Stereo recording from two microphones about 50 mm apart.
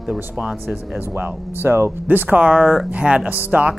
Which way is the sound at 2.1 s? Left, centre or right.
Right.